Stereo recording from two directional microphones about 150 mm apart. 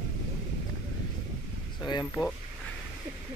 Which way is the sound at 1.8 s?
30° left (ahead or behind).